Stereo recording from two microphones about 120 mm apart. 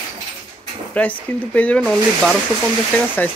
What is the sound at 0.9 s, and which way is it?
Speech, 10° left (ahead or behind).